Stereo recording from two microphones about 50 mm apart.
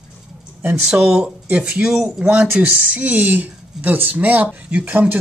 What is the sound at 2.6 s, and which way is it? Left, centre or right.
Speech, right.